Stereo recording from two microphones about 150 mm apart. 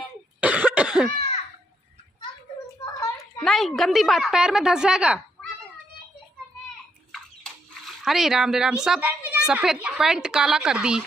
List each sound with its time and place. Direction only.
0.4 s cough: 10° right (ahead or behind)
2.6 s a sound: 20° left (ahead or behind)
3.4 s a woman's voice: centre (ahead or behind)
7.1 s speech: 5° left (ahead or behind)